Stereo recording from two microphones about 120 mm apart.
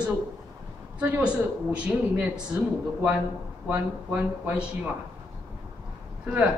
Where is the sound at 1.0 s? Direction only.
15° right (ahead or behind).